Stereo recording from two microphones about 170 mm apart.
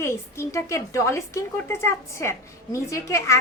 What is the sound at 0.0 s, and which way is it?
A woman's voice, 15° left (ahead or behind).